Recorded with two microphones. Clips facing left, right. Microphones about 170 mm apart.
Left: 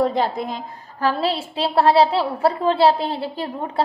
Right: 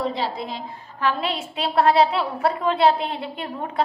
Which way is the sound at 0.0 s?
50° left (ahead or behind).